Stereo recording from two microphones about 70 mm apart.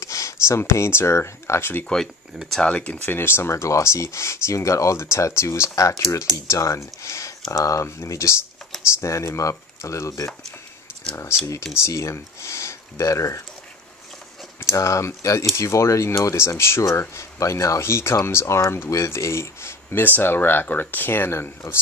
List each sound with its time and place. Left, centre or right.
0.0 s speech: left
2.6 s speech: centre
3.2 s speech: left
11.7 s speech: left
14.7 s speech: left